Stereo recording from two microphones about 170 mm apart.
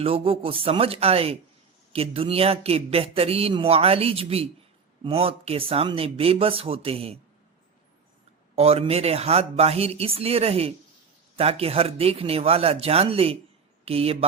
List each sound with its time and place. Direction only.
0.0 s a man's voice: 35° right (ahead or behind)
8.5 s a man's voice: 35° right (ahead or behind)